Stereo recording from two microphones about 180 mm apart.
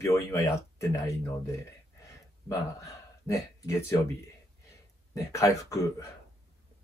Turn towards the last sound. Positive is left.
turn(degrees=20)  # may be behind; listen again after turning